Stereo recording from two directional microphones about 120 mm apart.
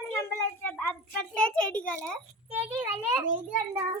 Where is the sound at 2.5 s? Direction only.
15° right (ahead or behind).